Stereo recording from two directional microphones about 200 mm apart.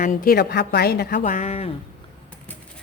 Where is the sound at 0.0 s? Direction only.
40° left (ahead or behind).